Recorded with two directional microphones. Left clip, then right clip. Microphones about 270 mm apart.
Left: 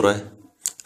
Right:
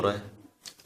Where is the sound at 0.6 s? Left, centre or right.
Left.